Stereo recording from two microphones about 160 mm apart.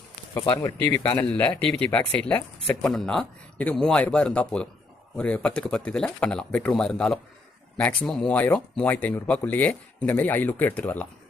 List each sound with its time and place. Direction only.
0.3 s speech: 25° left (ahead or behind)
0.8 s speech: 15° left (ahead or behind)